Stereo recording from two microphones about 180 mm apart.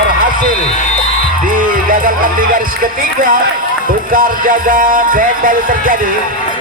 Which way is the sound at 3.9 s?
50° right (ahead or behind).